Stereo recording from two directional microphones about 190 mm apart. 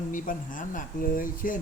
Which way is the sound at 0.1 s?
45° left (ahead or behind).